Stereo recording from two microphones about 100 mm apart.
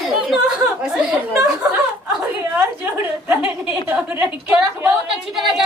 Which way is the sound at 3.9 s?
15° right (ahead or behind).